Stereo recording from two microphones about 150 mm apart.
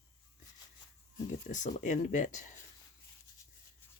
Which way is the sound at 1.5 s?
55° left (ahead or behind).